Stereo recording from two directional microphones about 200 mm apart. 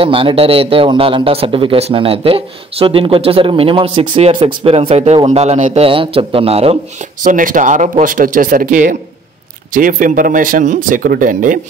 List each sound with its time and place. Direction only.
0.0 s a man's voice: 25° right (ahead or behind)
7.2 s speech: 40° right (ahead or behind)